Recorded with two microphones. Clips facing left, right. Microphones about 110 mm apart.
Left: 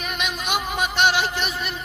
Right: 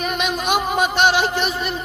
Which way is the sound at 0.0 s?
40° right (ahead or behind).